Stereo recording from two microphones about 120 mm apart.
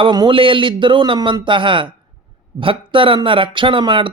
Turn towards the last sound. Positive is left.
turn(degrees=-45)  # may be behind; listen again after turning